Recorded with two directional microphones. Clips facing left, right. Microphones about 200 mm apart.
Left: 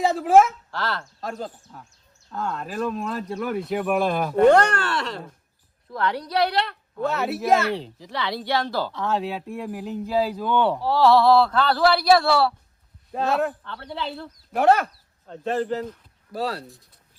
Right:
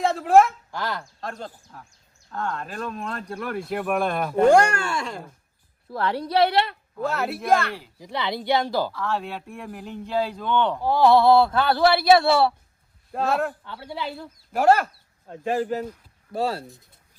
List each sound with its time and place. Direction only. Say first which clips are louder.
0.0 s speech: left 1 dB; centre (ahead or behind)
0.7 s speech: left 1 dB; 15° right (ahead or behind)
1.2 s speech: left 3 dB; 5° left (ahead or behind)
5.9 s speech: right 1 dB; 30° right (ahead or behind)
6.9 s speech: left 2 dB; centre (ahead or behind)
7.7 s speech: left 8 dB; 25° left (ahead or behind)
8.1 s speech: right 2 dB; 20° right (ahead or behind)
8.9 s speech: left 2 dB; 20° left (ahead or behind)
9.2 s speech: left 5 dB; 5° left (ahead or behind)
10.8 s speech: right 2 dB; 15° right (ahead or behind)
13.1 s speech: left 1 dB; centre (ahead or behind)
16.3 s speech: right 2 dB; 25° right (ahead or behind)